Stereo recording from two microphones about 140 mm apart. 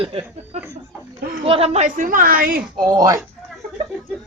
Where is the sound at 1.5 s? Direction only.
45° right (ahead or behind); by 2.6 s 85° right.